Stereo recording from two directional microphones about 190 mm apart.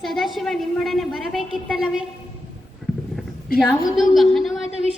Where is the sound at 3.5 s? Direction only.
50° left (ahead or behind).